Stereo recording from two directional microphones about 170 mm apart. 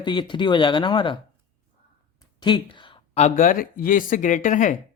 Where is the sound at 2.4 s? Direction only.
25° left (ahead or behind); by 4.8 s 50° left (ahead or behind).